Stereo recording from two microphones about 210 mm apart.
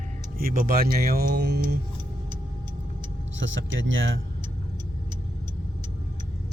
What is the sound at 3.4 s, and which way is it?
Speech, 60° right (ahead or behind).